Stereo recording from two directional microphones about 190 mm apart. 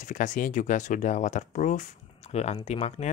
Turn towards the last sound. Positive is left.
turn(degrees=35)  # may be behind; listen again after turning